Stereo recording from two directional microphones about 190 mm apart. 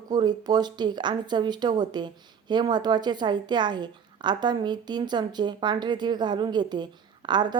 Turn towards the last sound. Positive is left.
turn(degrees=-25)  # may be behind; listen again after turning